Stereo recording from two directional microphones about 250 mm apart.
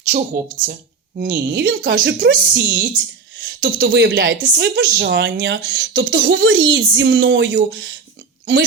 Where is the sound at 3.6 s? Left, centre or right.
Right.